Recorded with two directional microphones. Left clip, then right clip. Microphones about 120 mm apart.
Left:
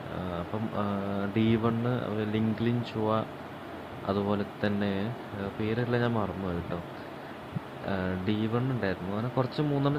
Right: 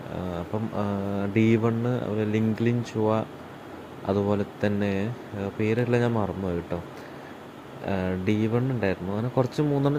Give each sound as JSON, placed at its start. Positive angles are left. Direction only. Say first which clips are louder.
{"t": 0.8, "sound": "speech", "louder": "right 2 dB", "side_deg": -30}
{"t": 7.9, "sound": "speech", "louder": "right 5 dB", "side_deg": -35}